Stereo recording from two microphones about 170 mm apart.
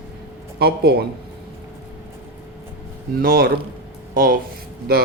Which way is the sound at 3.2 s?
60° right (ahead or behind).